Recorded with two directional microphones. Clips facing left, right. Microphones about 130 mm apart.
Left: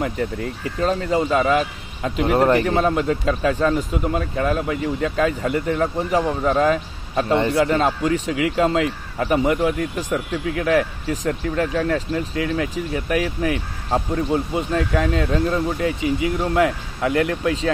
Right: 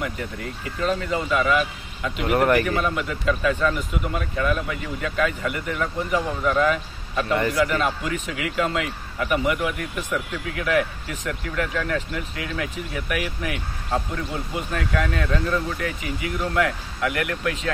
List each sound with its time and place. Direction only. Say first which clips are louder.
0.7 s speech: left 4 dB; 35° left (ahead or behind)